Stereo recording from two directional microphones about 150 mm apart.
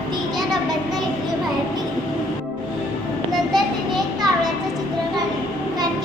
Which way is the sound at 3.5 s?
25° right (ahead or behind).